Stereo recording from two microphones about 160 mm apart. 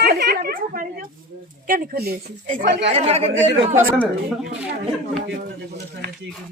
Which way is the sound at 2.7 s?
90° right.